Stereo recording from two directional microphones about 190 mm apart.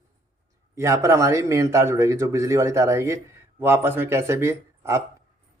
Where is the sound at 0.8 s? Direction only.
15° right (ahead or behind).